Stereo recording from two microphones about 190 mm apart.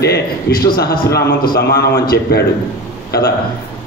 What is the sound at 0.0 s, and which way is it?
A man's voice, 55° left (ahead or behind).